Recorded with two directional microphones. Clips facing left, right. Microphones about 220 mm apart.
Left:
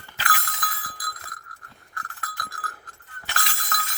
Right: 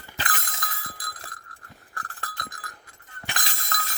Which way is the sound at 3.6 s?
25° right (ahead or behind).